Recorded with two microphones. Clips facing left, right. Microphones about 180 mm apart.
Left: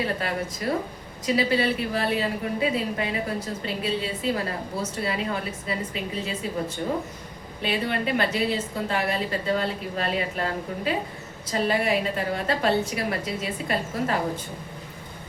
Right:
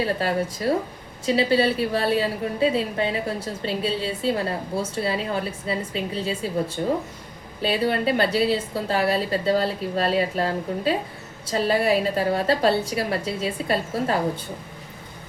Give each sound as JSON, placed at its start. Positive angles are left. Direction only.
{"t": 0.2, "sound": "a woman's voice", "side_deg": -30}